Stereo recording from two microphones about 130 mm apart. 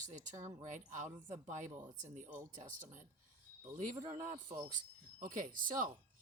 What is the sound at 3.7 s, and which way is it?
Speech, 75° right (ahead or behind).